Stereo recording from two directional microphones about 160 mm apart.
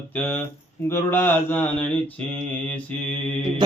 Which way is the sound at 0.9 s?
15° left (ahead or behind).